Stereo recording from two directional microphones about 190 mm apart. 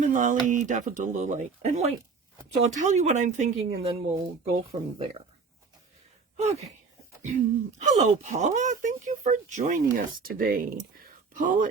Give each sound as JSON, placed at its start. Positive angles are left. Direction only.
{"t": 0.0, "sound": "speech", "side_deg": -40}
{"t": 6.3, "sound": "a sound", "side_deg": -35}
{"t": 7.2, "sound": "speech", "side_deg": -35}